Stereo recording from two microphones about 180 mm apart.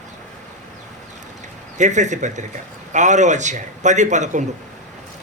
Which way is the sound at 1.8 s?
40° right (ahead or behind).